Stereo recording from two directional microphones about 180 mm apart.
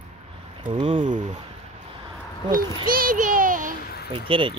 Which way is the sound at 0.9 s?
45° right (ahead or behind).